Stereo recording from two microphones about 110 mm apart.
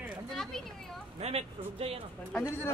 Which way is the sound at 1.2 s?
65° right (ahead or behind).